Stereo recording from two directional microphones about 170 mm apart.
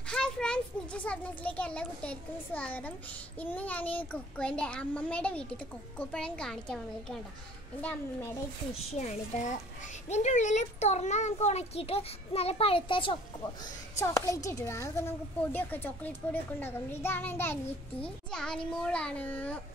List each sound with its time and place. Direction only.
0.1 s a child's voice: 5° left (ahead or behind)
8.9 s a child's voice: 45° left (ahead or behind)
13.9 s a woman's voice: 20° left (ahead or behind)